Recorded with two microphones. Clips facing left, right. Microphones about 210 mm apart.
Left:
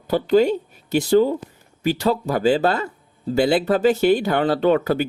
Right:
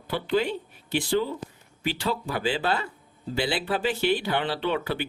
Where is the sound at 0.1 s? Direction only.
40° left (ahead or behind).